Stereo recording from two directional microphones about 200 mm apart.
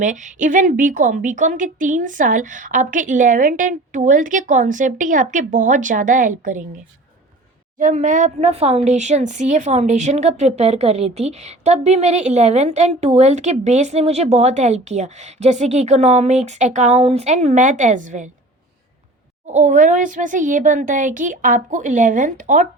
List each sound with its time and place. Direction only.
0.0 s speech: 40° right (ahead or behind)
7.8 s speech: 40° right (ahead or behind)
19.5 s speech: 35° right (ahead or behind)